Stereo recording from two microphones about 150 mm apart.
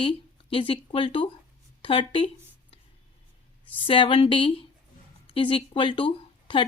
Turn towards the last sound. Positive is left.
turn(degrees=35)  # may be behind; listen again after turning